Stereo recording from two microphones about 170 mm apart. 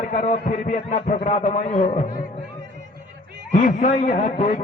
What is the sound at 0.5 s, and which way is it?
Music, 50° left (ahead or behind).